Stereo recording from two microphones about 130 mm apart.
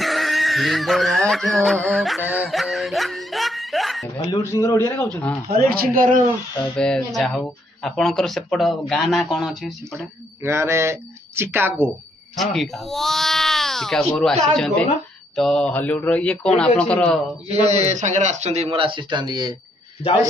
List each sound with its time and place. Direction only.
0.0 s speech: centre (ahead or behind)
2.1 s music: 10° right (ahead or behind)
2.5 s speech: centre (ahead or behind)
4.2 s speech: 25° left (ahead or behind)
6.8 s speech: 5° left (ahead or behind)
9.9 s speech: 20° right (ahead or behind)
12.4 s a man's voice: centre (ahead or behind)
17.5 s speech: 55° right (ahead or behind); by 19.5 s 35° right (ahead or behind)